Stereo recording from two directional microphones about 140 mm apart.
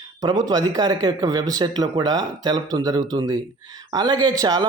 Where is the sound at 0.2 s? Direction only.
30° right (ahead or behind).